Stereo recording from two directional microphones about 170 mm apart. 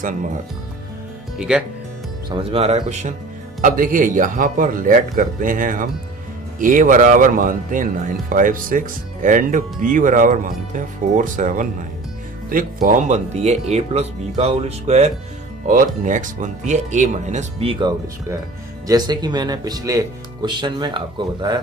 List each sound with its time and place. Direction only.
1.5 s speech: 5° right (ahead or behind)
2.2 s speech: 35° right (ahead or behind)
3.6 s speech: 55° right (ahead or behind); by 21.5 s 25° right (ahead or behind)